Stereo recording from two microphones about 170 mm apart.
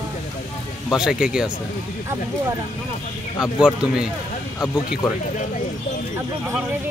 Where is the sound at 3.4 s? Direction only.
5° right (ahead or behind).